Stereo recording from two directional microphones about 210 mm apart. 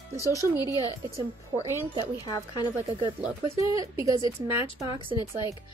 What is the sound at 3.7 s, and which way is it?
Speech, 15° right (ahead or behind).